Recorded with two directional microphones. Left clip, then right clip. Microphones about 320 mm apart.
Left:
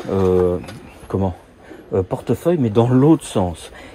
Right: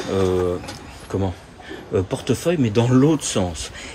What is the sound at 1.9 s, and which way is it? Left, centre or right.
Speech, centre.